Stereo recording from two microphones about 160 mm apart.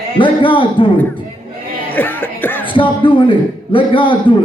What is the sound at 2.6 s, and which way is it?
A man's voice, 30° left (ahead or behind).